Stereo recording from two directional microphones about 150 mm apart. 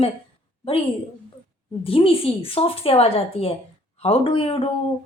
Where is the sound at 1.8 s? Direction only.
40° left (ahead or behind).